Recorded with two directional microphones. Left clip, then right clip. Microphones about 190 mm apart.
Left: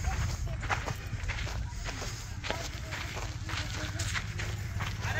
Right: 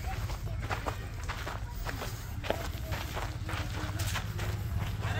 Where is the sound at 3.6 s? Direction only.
35° right (ahead or behind).